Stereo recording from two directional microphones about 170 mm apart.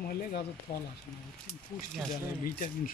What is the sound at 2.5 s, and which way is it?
Speech, 55° left (ahead or behind).